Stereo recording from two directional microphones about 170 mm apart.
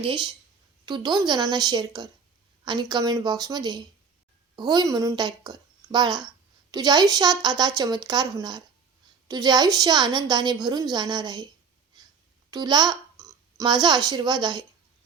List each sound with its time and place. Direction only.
0.0 s a woman's voice: 30° right (ahead or behind)
12.5 s a sound: 25° right (ahead or behind)
13.8 s a woman's voice: 25° right (ahead or behind)